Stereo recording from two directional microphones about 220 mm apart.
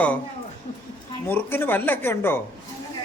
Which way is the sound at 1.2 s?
10° left (ahead or behind).